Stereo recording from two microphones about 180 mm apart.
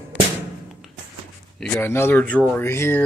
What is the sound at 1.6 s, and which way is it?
Speech, 10° left (ahead or behind).